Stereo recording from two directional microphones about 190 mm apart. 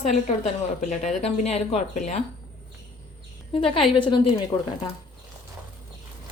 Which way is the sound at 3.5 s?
30° left (ahead or behind).